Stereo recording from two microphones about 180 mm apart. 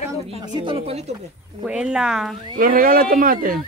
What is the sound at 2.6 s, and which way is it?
Speech, 50° right (ahead or behind).